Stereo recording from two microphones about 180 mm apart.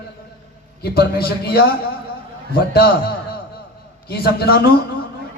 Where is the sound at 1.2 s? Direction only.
60° left (ahead or behind).